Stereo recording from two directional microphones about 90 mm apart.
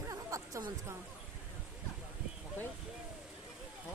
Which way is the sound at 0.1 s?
35° right (ahead or behind).